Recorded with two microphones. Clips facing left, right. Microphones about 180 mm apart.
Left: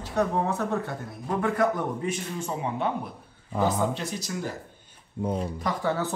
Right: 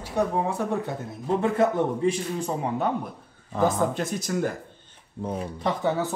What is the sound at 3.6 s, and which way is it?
Speech, 50° right (ahead or behind).